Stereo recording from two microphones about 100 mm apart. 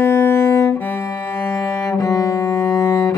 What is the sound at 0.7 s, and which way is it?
Cello, 15° left (ahead or behind).